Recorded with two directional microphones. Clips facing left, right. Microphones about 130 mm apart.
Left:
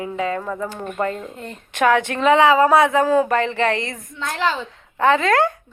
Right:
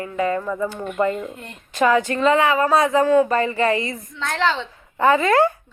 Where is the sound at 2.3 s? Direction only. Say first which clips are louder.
Left 4 dB; 90° left.